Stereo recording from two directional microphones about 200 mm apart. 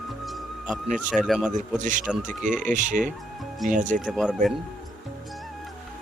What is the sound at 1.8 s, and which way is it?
Speech, 40° right (ahead or behind).